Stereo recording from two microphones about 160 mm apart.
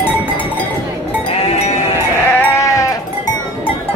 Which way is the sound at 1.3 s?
40° left (ahead or behind).